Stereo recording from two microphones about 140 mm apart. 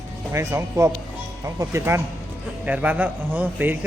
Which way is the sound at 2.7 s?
10° right (ahead or behind).